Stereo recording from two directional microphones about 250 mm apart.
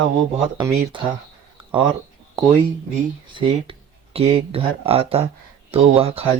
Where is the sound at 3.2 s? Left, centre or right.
Centre.